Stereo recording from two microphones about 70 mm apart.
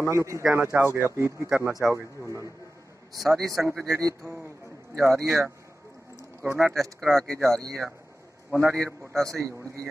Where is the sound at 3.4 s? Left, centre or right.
Right.